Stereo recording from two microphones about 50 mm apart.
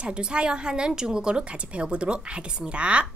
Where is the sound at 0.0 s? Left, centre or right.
Centre.